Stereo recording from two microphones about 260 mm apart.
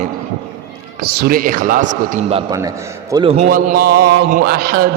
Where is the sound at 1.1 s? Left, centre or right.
Right.